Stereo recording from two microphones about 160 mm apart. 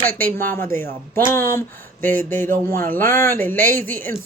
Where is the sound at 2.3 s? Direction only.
15° left (ahead or behind).